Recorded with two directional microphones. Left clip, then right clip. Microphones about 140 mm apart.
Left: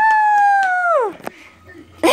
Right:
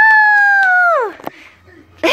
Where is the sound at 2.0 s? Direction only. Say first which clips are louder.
Even; 30° left (ahead or behind).